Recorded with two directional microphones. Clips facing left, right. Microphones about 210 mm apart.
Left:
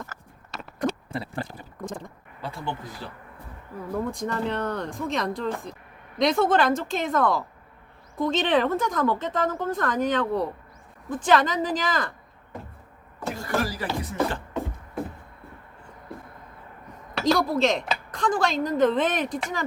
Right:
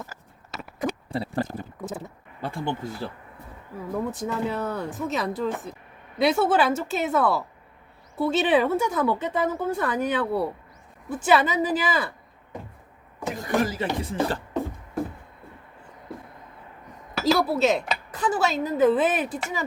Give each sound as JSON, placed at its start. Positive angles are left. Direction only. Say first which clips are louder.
{"t": 0.5, "sound": "a sound", "louder": "left 1 dB", "side_deg": -5}
{"t": 1.1, "sound": "speech", "louder": "right 5 dB", "side_deg": -35}
{"t": 1.8, "sound": "speech", "louder": "left 2 dB", "side_deg": -5}
{"t": 2.4, "sound": "speech", "louder": "right 4 dB", "side_deg": -50}
{"t": 3.9, "sound": "speech", "louder": "even", "side_deg": -5}
{"t": 13.1, "sound": "speech", "louder": "right 3 dB", "side_deg": -15}
{"t": 17.2, "sound": "speech", "louder": "even", "side_deg": -5}